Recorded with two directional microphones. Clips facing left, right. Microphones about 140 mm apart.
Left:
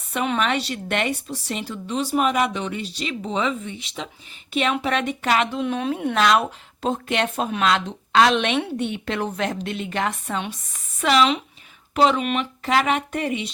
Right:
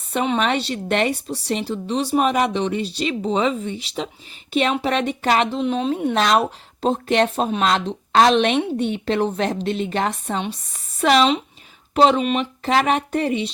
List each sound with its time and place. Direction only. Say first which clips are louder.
0.1 s speech: right 3 dB; 30° right (ahead or behind)